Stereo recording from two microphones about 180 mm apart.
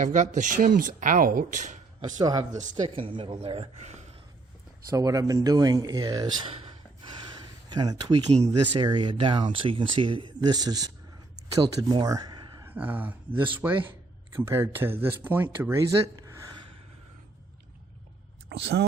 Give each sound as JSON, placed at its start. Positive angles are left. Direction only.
{"t": 0.0, "sound": "speech", "side_deg": -40}
{"t": 2.1, "sound": "speech", "side_deg": -20}
{"t": 4.9, "sound": "speech", "side_deg": -20}
{"t": 7.3, "sound": "a sound", "side_deg": -25}
{"t": 8.3, "sound": "speech", "side_deg": -35}
{"t": 8.8, "sound": "speech", "side_deg": -25}
{"t": 12.6, "sound": "speech", "side_deg": -10}
{"t": 15.9, "sound": "a sound", "side_deg": -20}
{"t": 18.4, "sound": "speech", "side_deg": -70}